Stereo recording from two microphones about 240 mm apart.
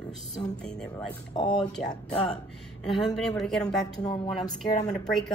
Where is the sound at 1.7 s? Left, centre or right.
Centre.